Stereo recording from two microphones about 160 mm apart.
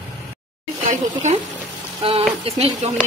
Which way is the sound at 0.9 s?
50° right (ahead or behind).